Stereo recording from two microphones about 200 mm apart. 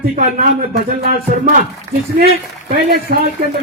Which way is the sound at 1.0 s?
50° right (ahead or behind).